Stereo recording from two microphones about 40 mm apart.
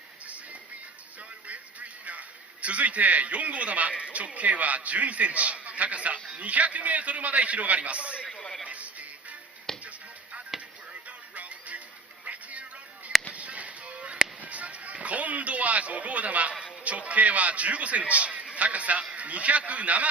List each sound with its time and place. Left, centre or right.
1.5 s a sound: right
4.4 s a man's voice: right
8.3 s a sound: left
8.6 s music: right
9.7 s music: centre
10.5 s music: centre
10.9 s music: right
13.3 s honk: right
14.4 s music: right
16.8 s a man's voice: right
18.5 s a sound: right
19.1 s a man's voice: right